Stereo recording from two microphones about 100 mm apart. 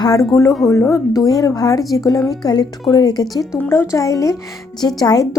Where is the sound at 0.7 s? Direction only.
30° left (ahead or behind).